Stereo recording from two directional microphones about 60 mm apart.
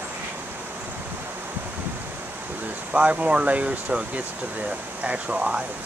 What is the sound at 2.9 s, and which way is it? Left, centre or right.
Speech, right.